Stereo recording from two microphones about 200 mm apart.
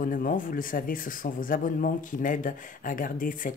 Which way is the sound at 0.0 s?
45° left (ahead or behind).